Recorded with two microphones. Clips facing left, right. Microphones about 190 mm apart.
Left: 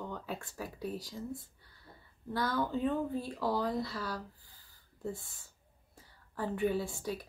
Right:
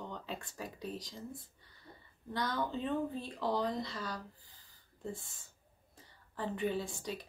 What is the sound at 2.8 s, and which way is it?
Speech, 5° left (ahead or behind).